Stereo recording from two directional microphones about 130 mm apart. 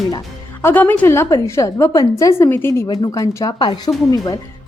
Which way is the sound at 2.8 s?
30° left (ahead or behind).